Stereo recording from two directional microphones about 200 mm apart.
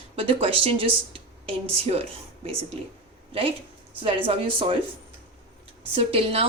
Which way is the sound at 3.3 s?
30° right (ahead or behind).